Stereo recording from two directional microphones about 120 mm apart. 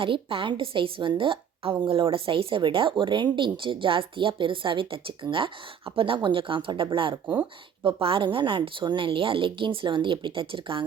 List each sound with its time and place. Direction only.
0.0 s a woman's voice: 50° right (ahead or behind)
7.3 s speech: 15° right (ahead or behind)
7.9 s a woman's voice: 50° right (ahead or behind)